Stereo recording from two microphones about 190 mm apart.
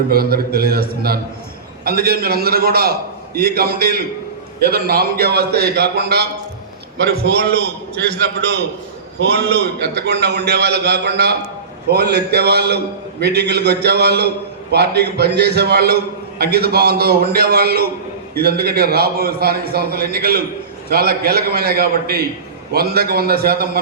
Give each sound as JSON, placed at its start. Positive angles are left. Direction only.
{"t": 0.1, "sound": "a man's voice", "side_deg": -55}
{"t": 9.3, "sound": "a man's voice", "side_deg": -60}